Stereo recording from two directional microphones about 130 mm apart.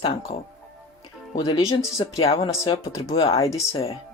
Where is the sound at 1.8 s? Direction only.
25° left (ahead or behind).